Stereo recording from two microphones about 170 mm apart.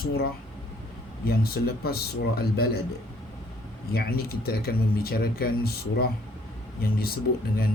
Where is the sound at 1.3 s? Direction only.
65° left (ahead or behind).